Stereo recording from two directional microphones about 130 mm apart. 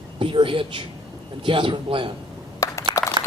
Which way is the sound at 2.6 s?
25° left (ahead or behind).